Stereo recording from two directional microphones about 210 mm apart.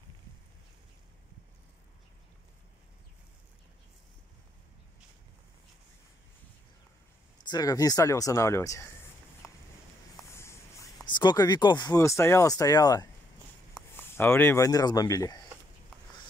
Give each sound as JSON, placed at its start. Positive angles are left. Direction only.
{"t": 7.4, "sound": "speech", "side_deg": 20}
{"t": 10.3, "sound": "a sound", "side_deg": 15}
{"t": 11.1, "sound": "speech", "side_deg": 20}